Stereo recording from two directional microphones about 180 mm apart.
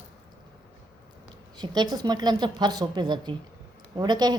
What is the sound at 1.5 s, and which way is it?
A woman's voice, 25° right (ahead or behind).